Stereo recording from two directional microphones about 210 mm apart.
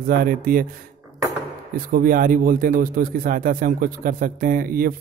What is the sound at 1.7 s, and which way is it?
A man's voice, 40° right (ahead or behind).